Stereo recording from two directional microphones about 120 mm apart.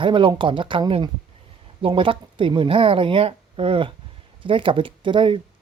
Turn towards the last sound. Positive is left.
turn(degrees=-45)  # may be behind; listen again after turning